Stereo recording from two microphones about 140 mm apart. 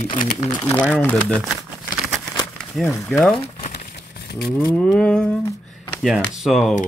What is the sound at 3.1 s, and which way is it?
Speech, 5° left (ahead or behind).